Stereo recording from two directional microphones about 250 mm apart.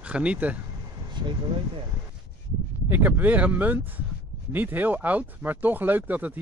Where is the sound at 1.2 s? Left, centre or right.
Centre.